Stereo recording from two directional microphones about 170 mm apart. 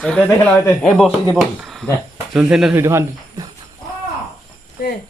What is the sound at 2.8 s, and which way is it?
Speech, 15° right (ahead or behind).